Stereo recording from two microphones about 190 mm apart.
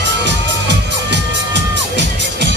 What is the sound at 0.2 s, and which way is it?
Music, 65° right (ahead or behind).